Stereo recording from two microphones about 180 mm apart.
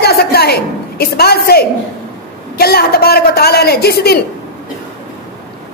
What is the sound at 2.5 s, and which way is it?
A woman's voice, 60° left (ahead or behind).